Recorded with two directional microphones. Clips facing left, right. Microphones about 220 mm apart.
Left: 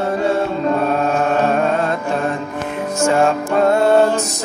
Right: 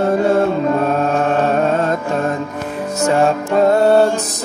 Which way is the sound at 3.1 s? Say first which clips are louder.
Right 1 dB; 40° right (ahead or behind).